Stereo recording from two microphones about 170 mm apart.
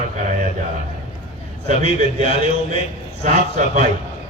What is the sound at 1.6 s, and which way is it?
Speech, 40° right (ahead or behind).